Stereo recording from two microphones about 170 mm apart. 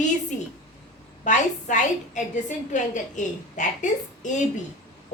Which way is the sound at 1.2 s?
45° left (ahead or behind).